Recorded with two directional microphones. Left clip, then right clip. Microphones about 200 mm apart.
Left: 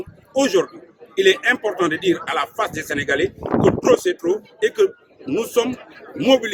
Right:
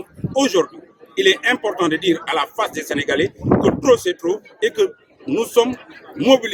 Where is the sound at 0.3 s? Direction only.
Centre (ahead or behind).